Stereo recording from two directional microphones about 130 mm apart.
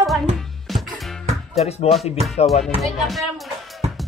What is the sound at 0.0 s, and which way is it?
Music, centre (ahead or behind).